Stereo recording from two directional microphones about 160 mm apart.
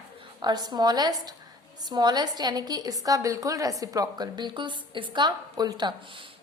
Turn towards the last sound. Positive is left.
turn(degrees=-30)  # may be behind; listen again after turning